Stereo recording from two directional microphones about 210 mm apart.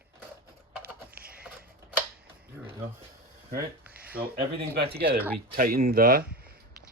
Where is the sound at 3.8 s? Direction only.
5° right (ahead or behind).